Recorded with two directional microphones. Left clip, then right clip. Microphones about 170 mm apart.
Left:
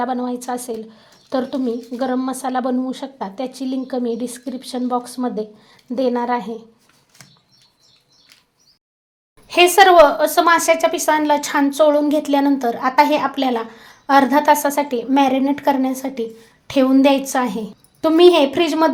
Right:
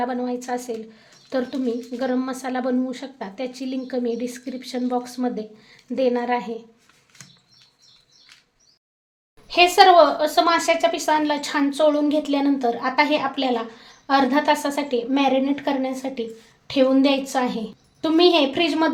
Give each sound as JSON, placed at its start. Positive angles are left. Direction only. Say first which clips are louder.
{"t": 0.0, "sound": "a woman's voice", "louder": "left 3 dB", "side_deg": 30}
{"t": 9.5, "sound": "a woman's voice", "louder": "left 3 dB", "side_deg": 35}